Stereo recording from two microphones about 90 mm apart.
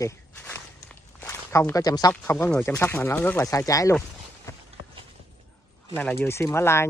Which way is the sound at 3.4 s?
40° left (ahead or behind).